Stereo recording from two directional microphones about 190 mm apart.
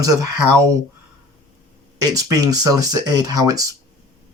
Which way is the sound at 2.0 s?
20° right (ahead or behind).